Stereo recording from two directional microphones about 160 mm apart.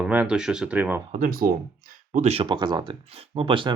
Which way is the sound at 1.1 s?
60° right (ahead or behind).